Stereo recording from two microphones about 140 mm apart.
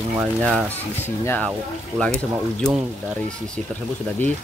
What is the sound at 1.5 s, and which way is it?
Speech, 5° left (ahead or behind).